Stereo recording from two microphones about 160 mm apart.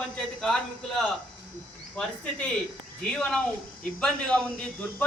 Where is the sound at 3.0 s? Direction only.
5° left (ahead or behind).